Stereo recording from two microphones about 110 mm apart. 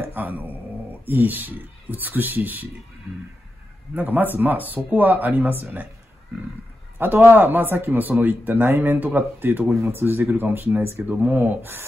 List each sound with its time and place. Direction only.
0.0 s speech: 15° right (ahead or behind)
3.9 s speech: 15° right (ahead or behind)
7.0 s speech: 20° right (ahead or behind)